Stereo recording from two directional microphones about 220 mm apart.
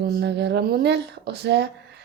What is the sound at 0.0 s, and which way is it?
Speech, 50° right (ahead or behind).